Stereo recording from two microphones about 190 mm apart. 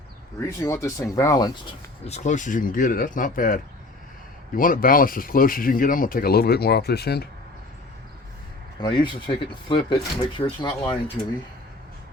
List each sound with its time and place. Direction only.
0.3 s speech: 15° left (ahead or behind)
2.0 s speech: 35° left (ahead or behind); by 7.3 s 55° left (ahead or behind)
8.8 s speech: 25° left (ahead or behind)